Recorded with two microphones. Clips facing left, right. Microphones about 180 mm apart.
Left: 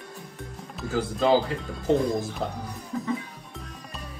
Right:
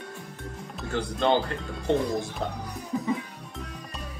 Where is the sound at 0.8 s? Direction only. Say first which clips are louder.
Left 2 dB; 5° left (ahead or behind).